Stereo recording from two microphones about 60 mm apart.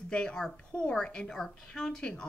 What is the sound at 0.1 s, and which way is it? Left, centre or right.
A woman's voice, centre.